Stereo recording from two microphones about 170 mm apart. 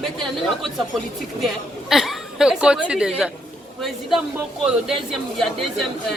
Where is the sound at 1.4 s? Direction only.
Centre (ahead or behind).